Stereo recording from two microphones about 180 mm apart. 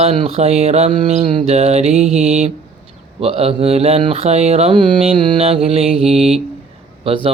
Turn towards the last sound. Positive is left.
turn(degrees=-30)  # may be behind; listen again after turning